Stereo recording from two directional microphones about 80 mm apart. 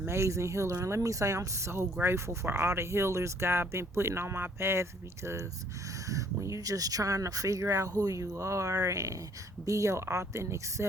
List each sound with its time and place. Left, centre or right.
0.0 s speech: right